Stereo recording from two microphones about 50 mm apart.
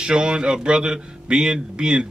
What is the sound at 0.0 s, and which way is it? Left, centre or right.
A man's voice, centre.